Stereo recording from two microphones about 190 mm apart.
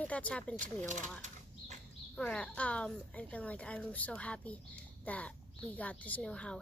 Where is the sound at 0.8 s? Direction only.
40° right (ahead or behind).